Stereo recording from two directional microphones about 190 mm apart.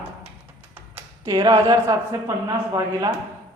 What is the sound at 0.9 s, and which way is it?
A man's voice, 20° right (ahead or behind).